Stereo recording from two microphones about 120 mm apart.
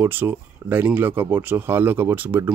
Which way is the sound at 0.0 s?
15° right (ahead or behind).